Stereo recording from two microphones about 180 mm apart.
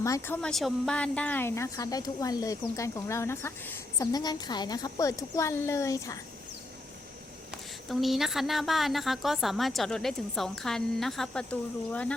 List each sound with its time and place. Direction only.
0.0 s a woman's voice: 15° left (ahead or behind)
0.4 s a woman's voice: 5° left (ahead or behind)
7.9 s a woman's voice: centre (ahead or behind)